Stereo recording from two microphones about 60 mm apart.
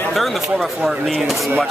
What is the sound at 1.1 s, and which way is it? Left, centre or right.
Speech, centre.